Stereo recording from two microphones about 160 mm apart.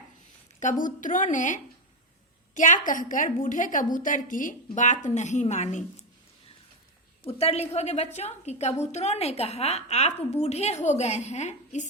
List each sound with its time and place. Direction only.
0.6 s a woman's voice: 55° left (ahead or behind)
7.3 s a woman's voice: 40° left (ahead or behind)